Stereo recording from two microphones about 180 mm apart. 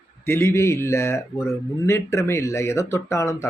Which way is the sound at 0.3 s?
15° left (ahead or behind).